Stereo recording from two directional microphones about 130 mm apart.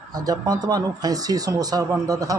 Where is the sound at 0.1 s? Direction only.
30° right (ahead or behind).